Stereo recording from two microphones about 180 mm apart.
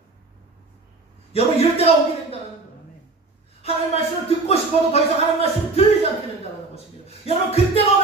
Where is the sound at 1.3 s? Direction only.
35° left (ahead or behind).